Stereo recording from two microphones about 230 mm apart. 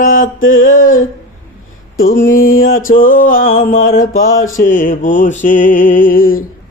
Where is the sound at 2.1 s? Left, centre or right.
Left.